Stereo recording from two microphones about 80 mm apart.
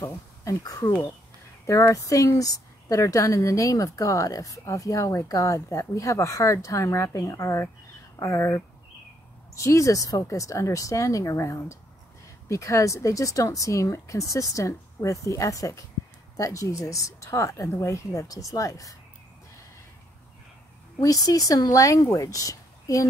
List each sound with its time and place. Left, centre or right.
0.0 s a woman's voice: left
21.0 s a woman's voice: left